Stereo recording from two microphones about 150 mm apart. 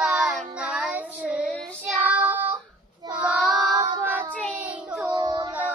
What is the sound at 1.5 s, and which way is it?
Child singing, 5° left (ahead or behind).